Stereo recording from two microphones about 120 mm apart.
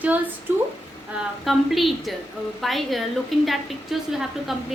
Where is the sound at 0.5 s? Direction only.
15° right (ahead or behind).